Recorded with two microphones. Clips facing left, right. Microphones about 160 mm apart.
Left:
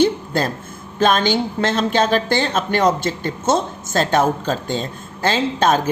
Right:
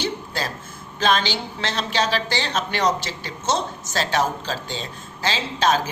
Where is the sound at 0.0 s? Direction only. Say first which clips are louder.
Left 10 dB; 50° left (ahead or behind).